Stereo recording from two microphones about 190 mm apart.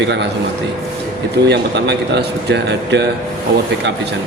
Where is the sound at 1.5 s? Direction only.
60° right (ahead or behind).